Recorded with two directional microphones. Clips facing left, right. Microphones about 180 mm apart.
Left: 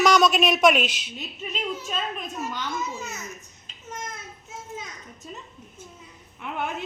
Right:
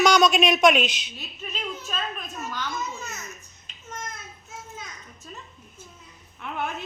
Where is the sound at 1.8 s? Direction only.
20° left (ahead or behind).